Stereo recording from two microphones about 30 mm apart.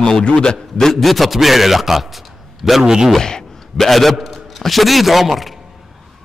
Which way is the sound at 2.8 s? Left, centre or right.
Centre.